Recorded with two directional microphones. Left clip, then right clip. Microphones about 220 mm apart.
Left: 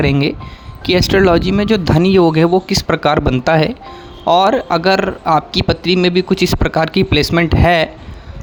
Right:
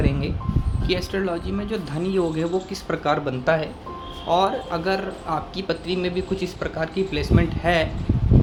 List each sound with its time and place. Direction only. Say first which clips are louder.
0.0 s a man's voice: left 11 dB; 45° left (ahead or behind)